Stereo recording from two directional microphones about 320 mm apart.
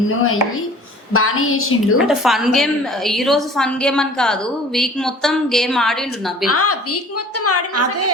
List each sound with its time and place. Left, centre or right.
1.1 s a woman's voice: left
2.0 s a woman's voice: centre
6.5 s a woman's voice: left
7.7 s a woman's voice: right